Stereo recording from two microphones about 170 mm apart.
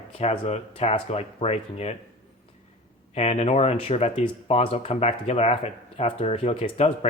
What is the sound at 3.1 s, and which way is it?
Speech, 40° left (ahead or behind).